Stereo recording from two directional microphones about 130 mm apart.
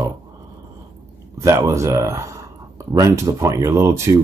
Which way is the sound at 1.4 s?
20° right (ahead or behind).